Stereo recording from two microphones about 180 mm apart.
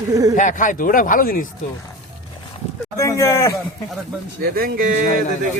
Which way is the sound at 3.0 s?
15° left (ahead or behind).